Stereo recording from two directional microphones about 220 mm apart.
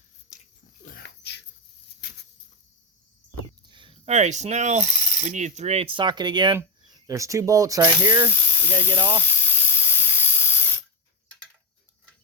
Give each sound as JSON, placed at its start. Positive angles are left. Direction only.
{"t": 0.8, "sound": "dog", "side_deg": 40}
{"t": 1.0, "sound": "dog", "side_deg": 50}
{"t": 3.7, "sound": "speech", "side_deg": -20}
{"t": 8.3, "sound": "snake", "side_deg": 10}
{"t": 8.7, "sound": "speech", "side_deg": -20}
{"t": 9.4, "sound": "spray", "side_deg": 10}